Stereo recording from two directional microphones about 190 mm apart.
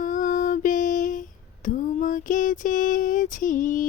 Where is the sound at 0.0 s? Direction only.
45° left (ahead or behind).